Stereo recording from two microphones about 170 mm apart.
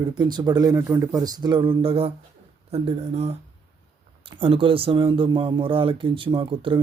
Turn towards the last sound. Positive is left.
turn(degrees=-30)  # may be behind; listen again after turning